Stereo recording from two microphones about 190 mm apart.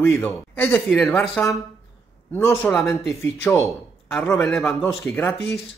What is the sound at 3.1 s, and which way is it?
Speech, 15° left (ahead or behind).